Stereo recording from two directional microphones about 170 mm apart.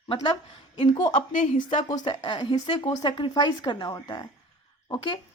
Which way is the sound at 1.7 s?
25° left (ahead or behind).